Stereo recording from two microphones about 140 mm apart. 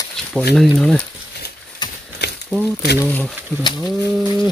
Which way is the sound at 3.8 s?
Centre (ahead or behind).